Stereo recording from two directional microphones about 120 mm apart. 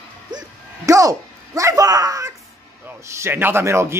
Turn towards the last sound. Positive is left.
turn(degrees=-20)  # may be behind; listen again after turning